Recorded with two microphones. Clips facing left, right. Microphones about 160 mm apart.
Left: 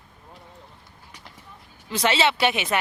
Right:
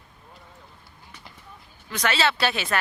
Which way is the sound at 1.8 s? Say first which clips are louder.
Left 3 dB; 25° left (ahead or behind).